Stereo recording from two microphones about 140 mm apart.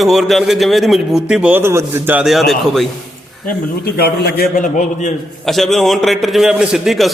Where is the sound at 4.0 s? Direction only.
90° left; by 5.1 s 70° left (ahead or behind).